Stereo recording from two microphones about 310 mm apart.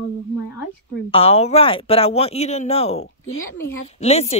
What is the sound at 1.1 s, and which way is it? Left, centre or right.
A woman's voice, centre.